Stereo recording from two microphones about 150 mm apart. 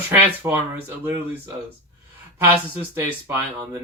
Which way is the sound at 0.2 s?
15° right (ahead or behind).